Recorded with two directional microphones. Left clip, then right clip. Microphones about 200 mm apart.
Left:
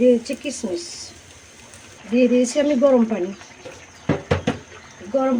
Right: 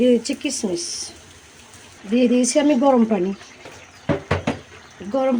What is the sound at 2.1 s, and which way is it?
Speech, 45° right (ahead or behind).